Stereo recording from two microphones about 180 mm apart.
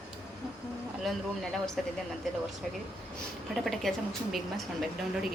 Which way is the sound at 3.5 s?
Centre (ahead or behind).